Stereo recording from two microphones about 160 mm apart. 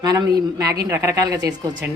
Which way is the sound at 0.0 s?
25° right (ahead or behind).